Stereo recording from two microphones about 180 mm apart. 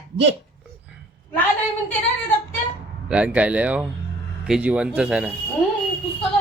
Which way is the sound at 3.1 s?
5° right (ahead or behind).